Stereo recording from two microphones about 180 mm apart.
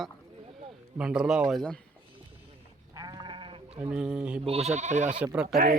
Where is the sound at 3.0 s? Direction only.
25° right (ahead or behind).